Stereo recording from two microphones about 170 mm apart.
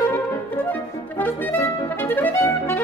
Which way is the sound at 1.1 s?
10° left (ahead or behind).